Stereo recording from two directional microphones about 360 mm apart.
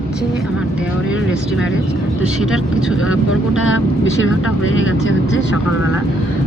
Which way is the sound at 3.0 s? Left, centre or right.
Left.